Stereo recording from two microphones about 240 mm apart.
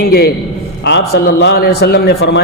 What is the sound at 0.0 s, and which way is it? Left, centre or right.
A man's voice, left.